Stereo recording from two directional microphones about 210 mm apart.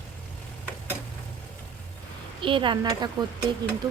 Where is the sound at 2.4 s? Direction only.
25° right (ahead or behind).